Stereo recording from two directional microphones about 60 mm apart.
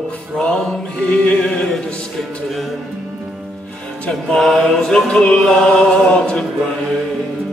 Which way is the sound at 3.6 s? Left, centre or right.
Centre.